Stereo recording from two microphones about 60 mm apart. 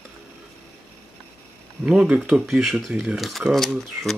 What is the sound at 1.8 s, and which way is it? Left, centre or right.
Speech, centre.